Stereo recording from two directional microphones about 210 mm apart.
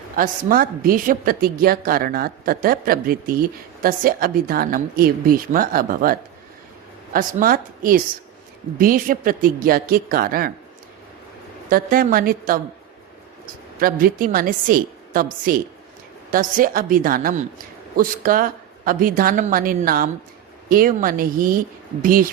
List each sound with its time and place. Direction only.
0.2 s a woman's voice: 40° right (ahead or behind)
11.7 s a woman's voice: 40° right (ahead or behind)
13.7 s a woman's voice: 45° right (ahead or behind)